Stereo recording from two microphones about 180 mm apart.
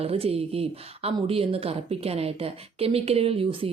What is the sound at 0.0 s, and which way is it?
Speech, 35° right (ahead or behind).